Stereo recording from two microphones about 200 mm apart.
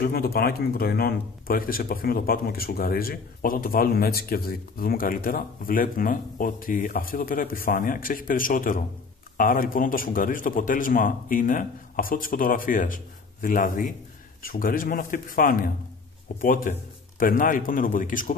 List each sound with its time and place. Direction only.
0.0 s speech: 50° left (ahead or behind)